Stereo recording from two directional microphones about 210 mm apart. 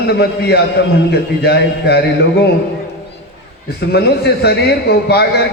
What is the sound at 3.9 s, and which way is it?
A man's voice, 50° left (ahead or behind).